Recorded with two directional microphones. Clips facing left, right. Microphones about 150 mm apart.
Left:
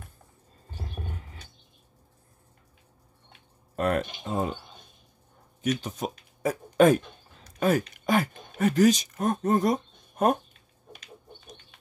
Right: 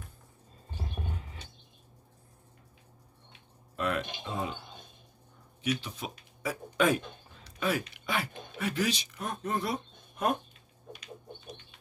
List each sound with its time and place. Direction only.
3.7 s speech: 45° left (ahead or behind)
5.6 s speech: 45° left (ahead or behind)